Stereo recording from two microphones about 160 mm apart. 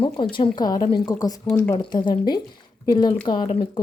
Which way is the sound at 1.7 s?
30° left (ahead or behind).